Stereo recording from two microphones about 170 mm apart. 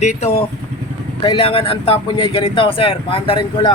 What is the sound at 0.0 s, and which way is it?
Speech, 40° left (ahead or behind).